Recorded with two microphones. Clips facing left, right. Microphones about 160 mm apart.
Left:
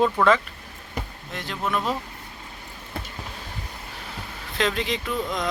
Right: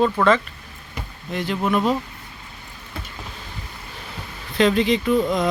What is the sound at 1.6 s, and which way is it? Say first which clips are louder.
Speech: right 5 dB; 5° right (ahead or behind).